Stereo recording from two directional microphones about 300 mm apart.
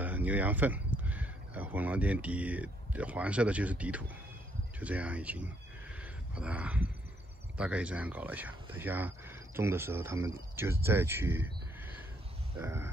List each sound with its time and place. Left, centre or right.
0.0 s speech: centre
5.9 s wild animals: centre
7.5 s speech: centre
12.5 s speech: centre